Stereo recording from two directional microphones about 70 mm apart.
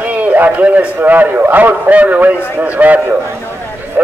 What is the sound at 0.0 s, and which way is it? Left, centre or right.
A man's voice, right.